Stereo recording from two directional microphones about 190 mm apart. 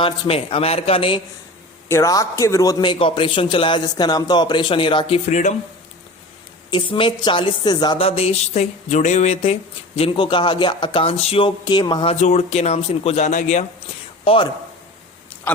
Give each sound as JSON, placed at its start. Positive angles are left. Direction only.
{"t": 0.0, "sound": "speech", "side_deg": 30}
{"t": 1.9, "sound": "speech", "side_deg": 15}
{"t": 6.7, "sound": "speech", "side_deg": 25}
{"t": 12.2, "sound": "speech", "side_deg": 35}
{"t": 14.3, "sound": "speech", "side_deg": 25}